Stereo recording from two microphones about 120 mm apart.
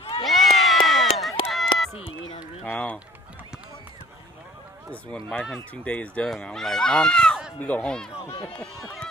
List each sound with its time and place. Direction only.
0.0 s a sound: 50° left (ahead or behind)
0.3 s crowd: centre (ahead or behind)
1.5 s run: centre (ahead or behind)
2.0 s run: 50° left (ahead or behind)
2.6 s run: 10° left (ahead or behind)
4.9 s speech: 10° left (ahead or behind)